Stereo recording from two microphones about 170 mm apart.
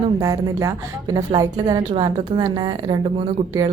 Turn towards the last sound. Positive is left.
turn(degrees=-25)  # may be behind; listen again after turning